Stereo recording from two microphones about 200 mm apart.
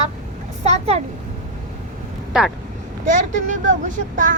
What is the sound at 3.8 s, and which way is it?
Speech, 40° right (ahead or behind).